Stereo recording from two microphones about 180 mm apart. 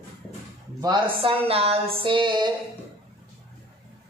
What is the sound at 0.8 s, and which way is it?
Speech, 30° right (ahead or behind).